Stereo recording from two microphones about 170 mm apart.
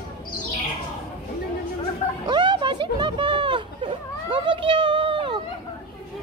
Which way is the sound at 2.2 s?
25° right (ahead or behind).